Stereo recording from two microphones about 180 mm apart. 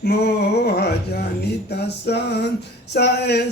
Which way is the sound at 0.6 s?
65° left (ahead or behind).